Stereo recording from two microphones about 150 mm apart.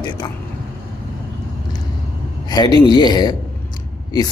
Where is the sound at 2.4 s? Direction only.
25° left (ahead or behind).